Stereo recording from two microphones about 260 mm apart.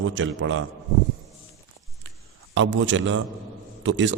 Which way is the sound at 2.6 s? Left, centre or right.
Right.